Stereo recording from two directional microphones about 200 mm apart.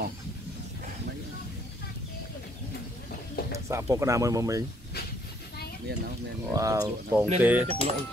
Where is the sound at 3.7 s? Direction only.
15° right (ahead or behind).